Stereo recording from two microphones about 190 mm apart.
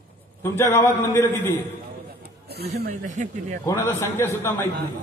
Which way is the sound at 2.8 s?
45° right (ahead or behind).